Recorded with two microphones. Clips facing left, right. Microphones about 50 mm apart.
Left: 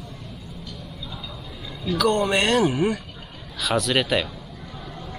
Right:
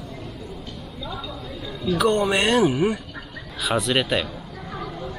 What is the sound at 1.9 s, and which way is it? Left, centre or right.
Speech, right.